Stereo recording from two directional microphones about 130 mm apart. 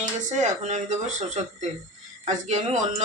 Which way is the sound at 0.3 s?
70° right (ahead or behind).